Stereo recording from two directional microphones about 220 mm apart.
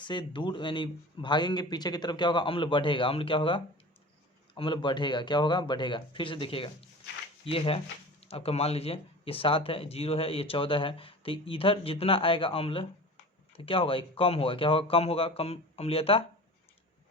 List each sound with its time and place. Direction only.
0.0 s speech: 20° left (ahead or behind)